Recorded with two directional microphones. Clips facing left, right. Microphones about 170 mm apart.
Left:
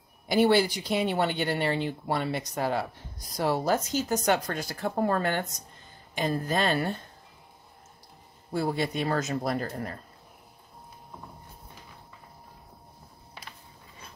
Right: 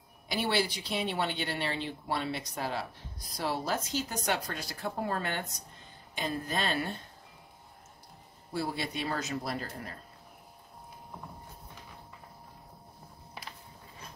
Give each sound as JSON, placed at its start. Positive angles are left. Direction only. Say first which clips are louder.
{"t": 0.3, "sound": "speech", "louder": "left 9 dB", "side_deg": 45}
{"t": 8.5, "sound": "speech", "louder": "left 6 dB", "side_deg": 50}